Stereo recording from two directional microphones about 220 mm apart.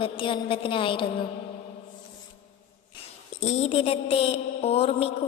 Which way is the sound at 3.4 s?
30° left (ahead or behind).